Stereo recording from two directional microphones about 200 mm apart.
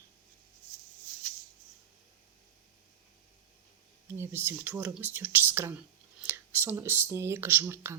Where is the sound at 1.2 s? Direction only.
50° right (ahead or behind).